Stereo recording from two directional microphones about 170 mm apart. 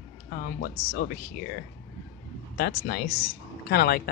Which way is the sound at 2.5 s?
60° left (ahead or behind).